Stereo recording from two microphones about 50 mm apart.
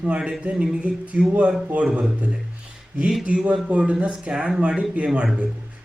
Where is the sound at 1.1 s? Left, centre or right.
Right.